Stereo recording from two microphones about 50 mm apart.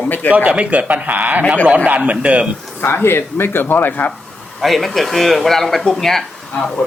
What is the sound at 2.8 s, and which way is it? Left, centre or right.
Speech, left.